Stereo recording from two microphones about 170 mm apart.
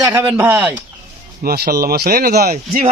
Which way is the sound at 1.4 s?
65° right (ahead or behind).